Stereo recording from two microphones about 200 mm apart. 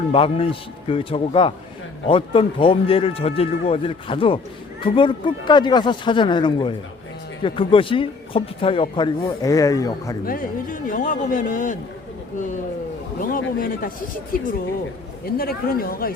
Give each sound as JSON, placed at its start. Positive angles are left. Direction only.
{"t": 0.1, "sound": "a man's voice", "side_deg": 25}
{"t": 10.2, "sound": "speech", "side_deg": 45}
{"t": 13.2, "sound": "a woman's voice", "side_deg": 45}
{"t": 15.4, "sound": "a woman's voice", "side_deg": 50}